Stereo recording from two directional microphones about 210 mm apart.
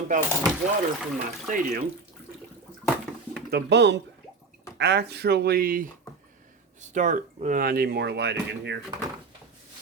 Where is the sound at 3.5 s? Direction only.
50° right (ahead or behind).